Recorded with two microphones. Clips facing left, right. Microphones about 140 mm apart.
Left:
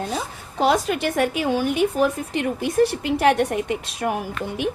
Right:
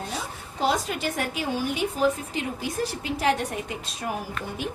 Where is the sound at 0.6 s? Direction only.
70° left (ahead or behind).